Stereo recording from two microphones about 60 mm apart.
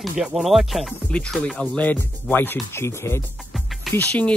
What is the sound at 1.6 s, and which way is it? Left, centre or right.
Speech, left.